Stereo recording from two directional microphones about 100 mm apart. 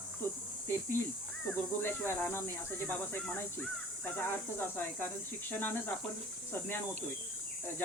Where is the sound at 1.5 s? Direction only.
20° left (ahead or behind).